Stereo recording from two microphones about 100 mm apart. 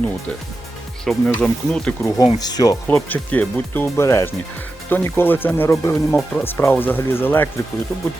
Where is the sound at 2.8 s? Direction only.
15° left (ahead or behind).